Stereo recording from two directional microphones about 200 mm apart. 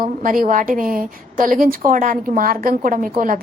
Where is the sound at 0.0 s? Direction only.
45° right (ahead or behind).